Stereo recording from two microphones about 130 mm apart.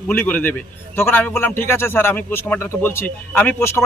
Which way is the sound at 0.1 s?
15° left (ahead or behind).